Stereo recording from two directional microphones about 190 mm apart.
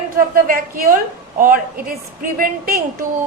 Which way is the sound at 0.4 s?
45° right (ahead or behind).